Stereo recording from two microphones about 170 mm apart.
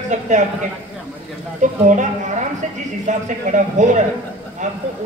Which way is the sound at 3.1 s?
45° right (ahead or behind).